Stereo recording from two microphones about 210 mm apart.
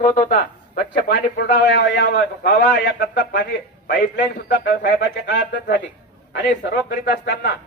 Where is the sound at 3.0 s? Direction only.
40° left (ahead or behind).